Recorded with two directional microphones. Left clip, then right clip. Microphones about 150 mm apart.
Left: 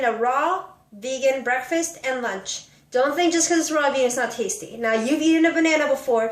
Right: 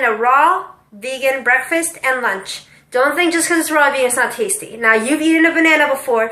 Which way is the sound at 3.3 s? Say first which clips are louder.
Right 6 dB; 40° left (ahead or behind).